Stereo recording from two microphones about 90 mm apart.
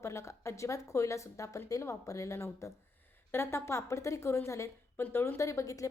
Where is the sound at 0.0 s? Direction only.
30° left (ahead or behind).